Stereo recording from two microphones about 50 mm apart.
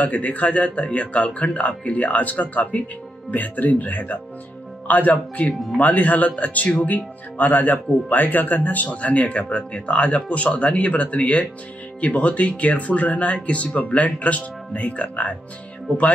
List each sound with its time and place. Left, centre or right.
0.0 s speech: left